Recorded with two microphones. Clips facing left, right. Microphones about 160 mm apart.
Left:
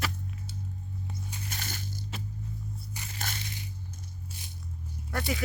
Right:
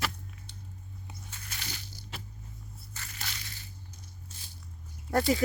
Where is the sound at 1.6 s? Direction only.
50° left (ahead or behind).